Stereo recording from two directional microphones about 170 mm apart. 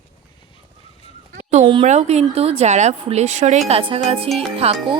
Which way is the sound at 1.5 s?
35° right (ahead or behind).